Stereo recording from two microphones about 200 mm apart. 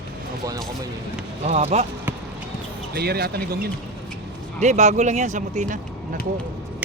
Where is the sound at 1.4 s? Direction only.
35° right (ahead or behind).